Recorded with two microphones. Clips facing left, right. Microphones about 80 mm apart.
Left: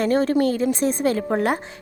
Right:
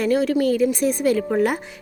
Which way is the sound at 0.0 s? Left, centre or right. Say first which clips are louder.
Even; left.